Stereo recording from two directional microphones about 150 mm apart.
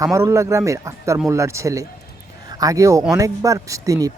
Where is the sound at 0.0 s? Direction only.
20° right (ahead or behind).